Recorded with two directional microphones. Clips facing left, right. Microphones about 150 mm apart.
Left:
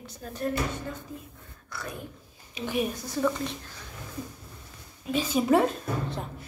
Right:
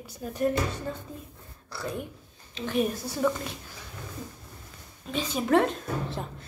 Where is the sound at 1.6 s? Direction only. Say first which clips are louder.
Right 5 dB; 30° right (ahead or behind).